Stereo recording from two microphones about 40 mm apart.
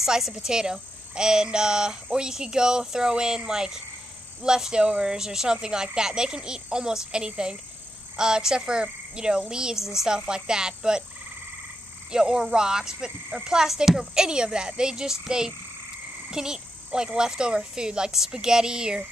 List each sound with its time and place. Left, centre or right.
0.0 s a child's voice: centre
9.8 s speech: centre
12.1 s speech: centre